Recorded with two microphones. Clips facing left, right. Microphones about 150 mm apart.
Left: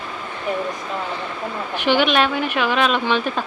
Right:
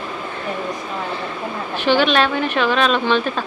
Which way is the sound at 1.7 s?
15° left (ahead or behind).